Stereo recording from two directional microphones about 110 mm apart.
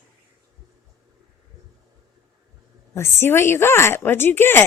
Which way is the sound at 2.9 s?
20° left (ahead or behind).